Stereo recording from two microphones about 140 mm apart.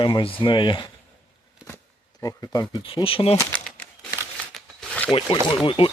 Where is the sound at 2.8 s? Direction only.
40° left (ahead or behind).